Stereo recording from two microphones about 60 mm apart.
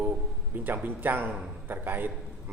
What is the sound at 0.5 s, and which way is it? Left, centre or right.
A man's voice, right.